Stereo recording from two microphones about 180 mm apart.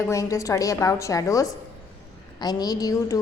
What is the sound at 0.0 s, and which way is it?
A woman's voice, 15° left (ahead or behind).